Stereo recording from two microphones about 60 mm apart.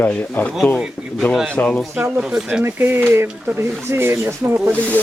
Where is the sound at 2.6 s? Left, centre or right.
Right.